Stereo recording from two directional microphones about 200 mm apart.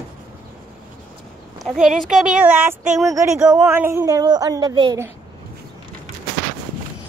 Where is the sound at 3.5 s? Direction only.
10° right (ahead or behind).